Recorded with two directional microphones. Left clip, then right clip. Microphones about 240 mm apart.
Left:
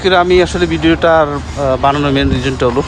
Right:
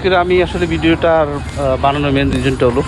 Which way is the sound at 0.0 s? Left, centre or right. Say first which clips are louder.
Left 3 dB; centre.